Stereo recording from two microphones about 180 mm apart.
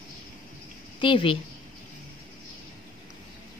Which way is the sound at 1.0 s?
30° left (ahead or behind).